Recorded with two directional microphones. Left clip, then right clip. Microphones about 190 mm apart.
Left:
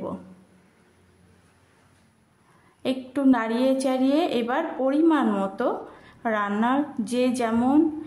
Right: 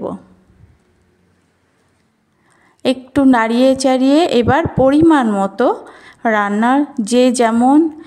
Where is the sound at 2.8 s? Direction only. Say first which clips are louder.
Right 10 dB; 40° right (ahead or behind).